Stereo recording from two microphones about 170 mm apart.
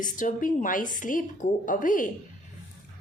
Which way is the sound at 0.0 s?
50° left (ahead or behind).